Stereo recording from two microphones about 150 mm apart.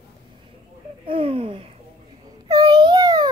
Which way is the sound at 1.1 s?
40° right (ahead or behind).